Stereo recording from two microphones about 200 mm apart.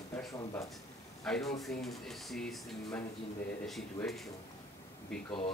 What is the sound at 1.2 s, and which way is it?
Speech, 5° left (ahead or behind).